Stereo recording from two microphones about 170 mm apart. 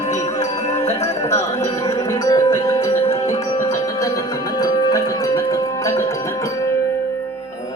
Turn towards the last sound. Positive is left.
turn(degrees=20)  # may be behind; listen again after turning